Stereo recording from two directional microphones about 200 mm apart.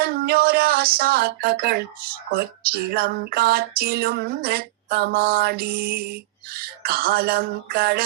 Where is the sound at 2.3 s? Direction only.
50° right (ahead or behind).